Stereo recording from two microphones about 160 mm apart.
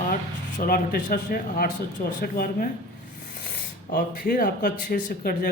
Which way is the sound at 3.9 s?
75° left (ahead or behind).